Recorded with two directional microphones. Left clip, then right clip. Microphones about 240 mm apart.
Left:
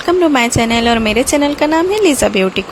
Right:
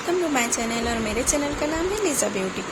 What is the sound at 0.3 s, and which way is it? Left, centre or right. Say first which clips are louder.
Speech: left 11 dB; left.